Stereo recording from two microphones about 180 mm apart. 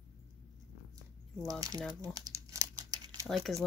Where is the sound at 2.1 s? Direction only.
20° right (ahead or behind).